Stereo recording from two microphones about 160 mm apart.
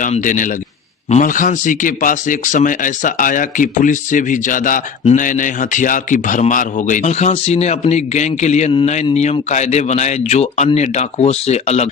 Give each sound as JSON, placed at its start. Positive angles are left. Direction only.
{"t": 0.0, "sound": "a man's voice", "side_deg": 50}